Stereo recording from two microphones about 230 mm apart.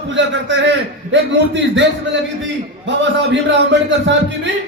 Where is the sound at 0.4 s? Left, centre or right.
Right.